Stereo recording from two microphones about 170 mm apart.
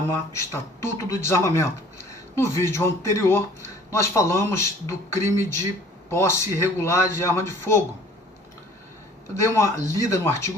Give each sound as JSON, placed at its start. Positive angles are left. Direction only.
{"t": 0.3, "sound": "speech", "side_deg": 15}
{"t": 9.3, "sound": "speech", "side_deg": 15}